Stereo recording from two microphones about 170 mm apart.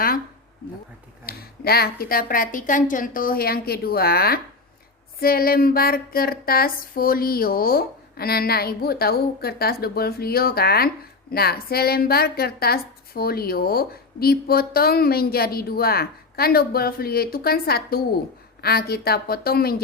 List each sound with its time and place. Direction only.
1.2 s a woman's voice: 65° left (ahead or behind)